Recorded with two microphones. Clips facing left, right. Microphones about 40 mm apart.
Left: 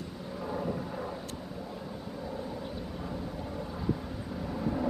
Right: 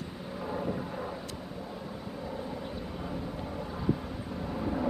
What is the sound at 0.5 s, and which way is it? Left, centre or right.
Thunder, centre.